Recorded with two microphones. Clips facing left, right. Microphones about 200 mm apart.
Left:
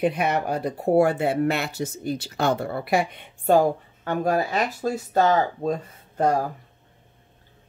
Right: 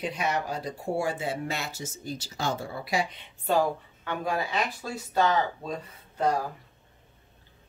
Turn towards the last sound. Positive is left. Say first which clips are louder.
# left 5 dB
turn(degrees=45)  # may be behind; listen again after turning